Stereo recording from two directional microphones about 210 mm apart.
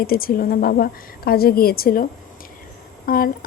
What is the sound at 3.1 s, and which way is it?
Speech, 45° left (ahead or behind).